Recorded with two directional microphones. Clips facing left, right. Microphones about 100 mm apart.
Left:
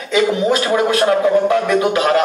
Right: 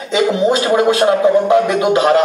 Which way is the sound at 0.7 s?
20° right (ahead or behind).